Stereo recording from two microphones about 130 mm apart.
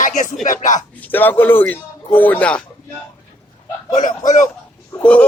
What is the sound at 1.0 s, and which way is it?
Speech, 15° left (ahead or behind).